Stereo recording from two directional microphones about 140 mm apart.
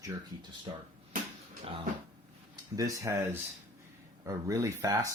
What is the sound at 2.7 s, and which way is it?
Speech, 25° right (ahead or behind).